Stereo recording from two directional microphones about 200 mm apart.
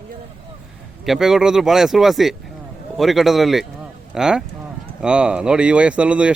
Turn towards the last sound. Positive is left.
turn(degrees=-5)  # may be behind; listen again after turning